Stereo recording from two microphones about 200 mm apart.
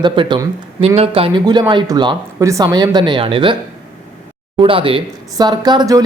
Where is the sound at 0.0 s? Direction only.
25° right (ahead or behind).